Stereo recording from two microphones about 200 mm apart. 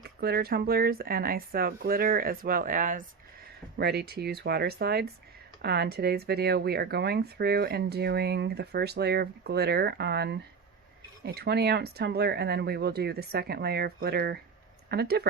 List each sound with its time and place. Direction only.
0.0 s speech: 50° right (ahead or behind)
3.8 s speech: 55° right (ahead or behind)